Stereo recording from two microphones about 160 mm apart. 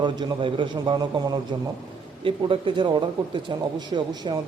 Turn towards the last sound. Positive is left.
turn(degrees=-25)  # may be behind; listen again after turning